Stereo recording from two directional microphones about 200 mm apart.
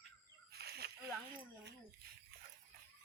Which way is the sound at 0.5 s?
55° right (ahead or behind).